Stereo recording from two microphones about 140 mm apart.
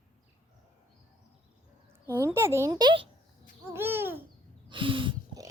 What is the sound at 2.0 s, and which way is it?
A child's voice, 15° right (ahead or behind).